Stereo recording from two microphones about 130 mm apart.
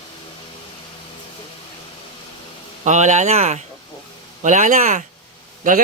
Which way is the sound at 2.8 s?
65° right (ahead or behind).